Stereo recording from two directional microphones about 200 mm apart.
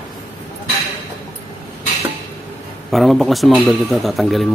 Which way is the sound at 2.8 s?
Centre (ahead or behind).